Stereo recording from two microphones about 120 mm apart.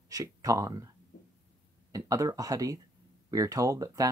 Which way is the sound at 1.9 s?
25° right (ahead or behind).